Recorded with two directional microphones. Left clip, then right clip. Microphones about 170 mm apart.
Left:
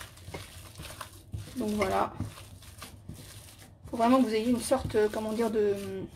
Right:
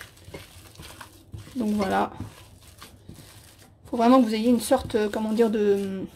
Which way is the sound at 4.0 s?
65° right (ahead or behind).